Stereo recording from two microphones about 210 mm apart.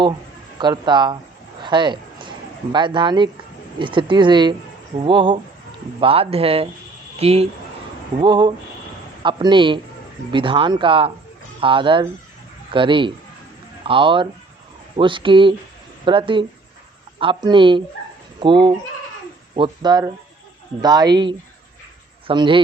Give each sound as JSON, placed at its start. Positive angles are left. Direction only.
{"t": 0.6, "sound": "speech", "side_deg": -20}
{"t": 1.6, "sound": "a sound", "side_deg": -20}
{"t": 2.7, "sound": "speech", "side_deg": -20}